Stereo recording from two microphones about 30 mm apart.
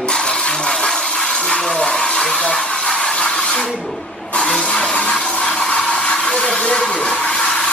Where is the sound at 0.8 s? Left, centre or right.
Left.